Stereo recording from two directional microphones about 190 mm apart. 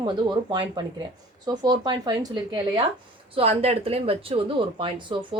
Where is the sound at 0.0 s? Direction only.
25° right (ahead or behind).